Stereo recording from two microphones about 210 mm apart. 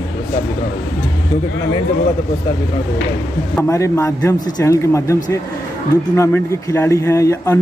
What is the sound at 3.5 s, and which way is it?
Speech, 15° left (ahead or behind).